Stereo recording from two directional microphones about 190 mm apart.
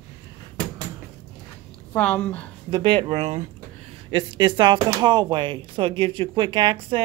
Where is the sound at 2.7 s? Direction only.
25° right (ahead or behind).